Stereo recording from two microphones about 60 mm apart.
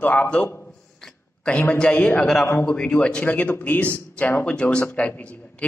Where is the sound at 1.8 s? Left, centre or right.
Left.